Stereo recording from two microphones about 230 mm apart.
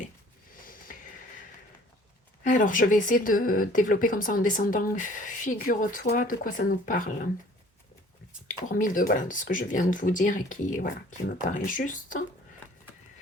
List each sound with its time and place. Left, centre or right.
0.6 s a sound: left
2.4 s speech: left
8.7 s speech: left